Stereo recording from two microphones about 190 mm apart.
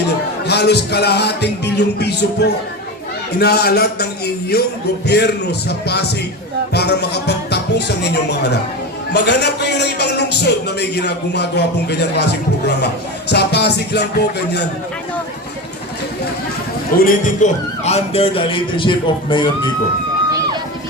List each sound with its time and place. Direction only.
0.4 s a man's voice: 60° left (ahead or behind)
13.3 s a man's voice: 60° left (ahead or behind)
17.0 s a man's voice: 45° left (ahead or behind); by 19.5 s 25° left (ahead or behind)